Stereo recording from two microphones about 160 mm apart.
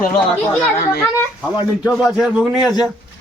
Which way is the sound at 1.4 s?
5° right (ahead or behind).